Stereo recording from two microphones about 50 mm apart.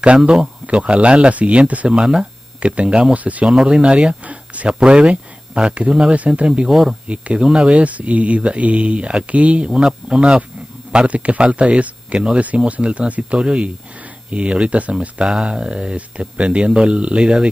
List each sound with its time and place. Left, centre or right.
0.0 s speech: centre
2.0 s a sound: centre
2.7 s speech: right
3.4 s speech: centre
6.7 s speech: centre
7.1 s speech: right
7.4 s speech: centre
7.7 s speech: right
9.8 s speech: centre